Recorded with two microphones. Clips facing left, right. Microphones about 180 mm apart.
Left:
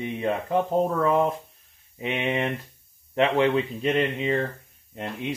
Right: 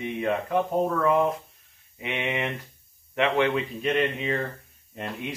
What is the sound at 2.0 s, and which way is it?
Speech, 30° left (ahead or behind).